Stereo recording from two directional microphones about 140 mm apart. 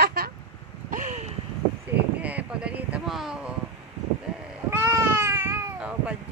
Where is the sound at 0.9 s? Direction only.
65° right (ahead or behind).